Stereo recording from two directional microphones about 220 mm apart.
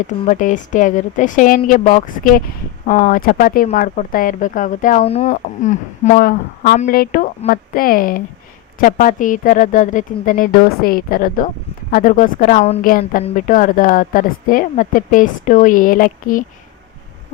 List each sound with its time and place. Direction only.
0.3 s a woman's voice: 35° left (ahead or behind)